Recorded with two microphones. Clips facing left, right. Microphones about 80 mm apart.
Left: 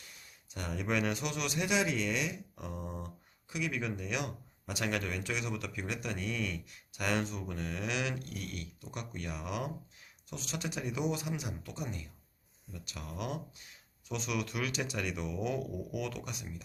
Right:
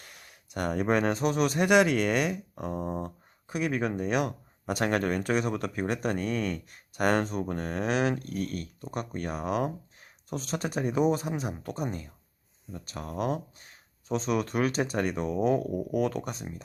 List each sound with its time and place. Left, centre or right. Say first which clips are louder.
0.0 s speech: right 5 dB; right